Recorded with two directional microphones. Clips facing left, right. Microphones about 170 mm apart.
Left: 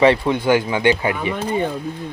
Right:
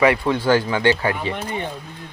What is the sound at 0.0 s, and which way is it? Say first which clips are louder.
Speech: left 2 dB; 25° left (ahead or behind).